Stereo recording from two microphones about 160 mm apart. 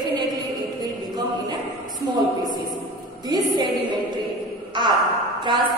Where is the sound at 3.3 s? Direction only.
25° right (ahead or behind).